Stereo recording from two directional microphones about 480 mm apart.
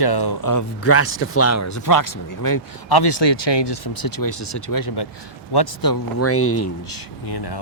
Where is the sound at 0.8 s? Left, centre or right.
Left.